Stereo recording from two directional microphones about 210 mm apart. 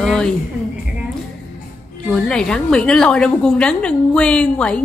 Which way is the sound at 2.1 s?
5° left (ahead or behind).